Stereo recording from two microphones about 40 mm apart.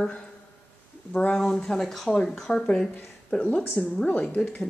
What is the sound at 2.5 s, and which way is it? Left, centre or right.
A woman's voice, left.